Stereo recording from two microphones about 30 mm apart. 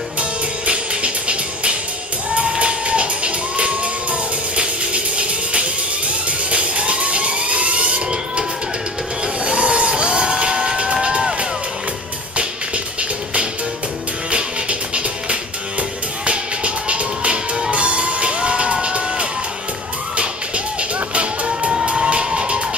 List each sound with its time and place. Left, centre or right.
0.2 s music: right
6.2 s a sound: right
9.4 s vehicle: right
10.8 s run: right
14.3 s music: right
21.6 s cheering: right